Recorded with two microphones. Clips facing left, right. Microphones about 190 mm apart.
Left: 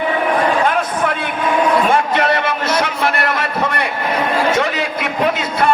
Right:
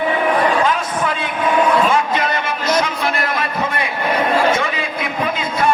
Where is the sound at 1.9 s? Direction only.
65° left (ahead or behind).